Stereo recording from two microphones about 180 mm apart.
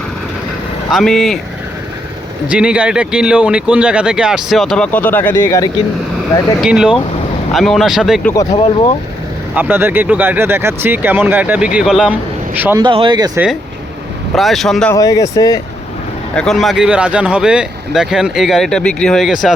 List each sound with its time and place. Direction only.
0.9 s speech: centre (ahead or behind)
2.5 s speech: 5° right (ahead or behind); by 5.7 s 20° left (ahead or behind)
6.6 s speech: 5° right (ahead or behind)
8.4 s speech: 30° left (ahead or behind)
9.6 s speech: 10° right (ahead or behind)
12.8 s speech: 25° right (ahead or behind)
14.3 s speech: centre (ahead or behind)
14.9 s speech: 20° left (ahead or behind)
16.3 s speech: 5° left (ahead or behind)